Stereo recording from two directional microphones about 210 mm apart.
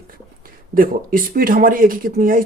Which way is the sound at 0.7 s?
40° right (ahead or behind).